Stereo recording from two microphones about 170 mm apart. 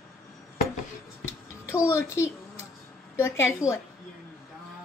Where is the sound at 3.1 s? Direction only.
15° left (ahead or behind).